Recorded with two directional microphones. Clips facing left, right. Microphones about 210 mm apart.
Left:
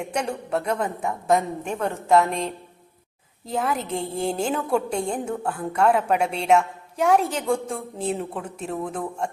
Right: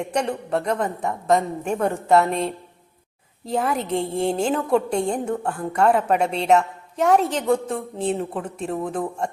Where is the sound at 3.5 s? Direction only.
Centre (ahead or behind).